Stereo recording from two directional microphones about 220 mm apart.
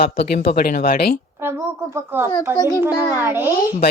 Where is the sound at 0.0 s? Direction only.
45° left (ahead or behind).